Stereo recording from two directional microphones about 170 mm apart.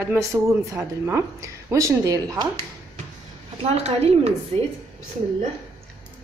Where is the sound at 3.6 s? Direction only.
35° right (ahead or behind).